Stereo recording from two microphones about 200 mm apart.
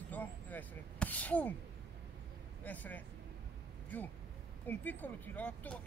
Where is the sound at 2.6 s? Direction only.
10° left (ahead or behind).